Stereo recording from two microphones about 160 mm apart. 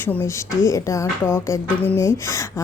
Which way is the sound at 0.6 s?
20° left (ahead or behind).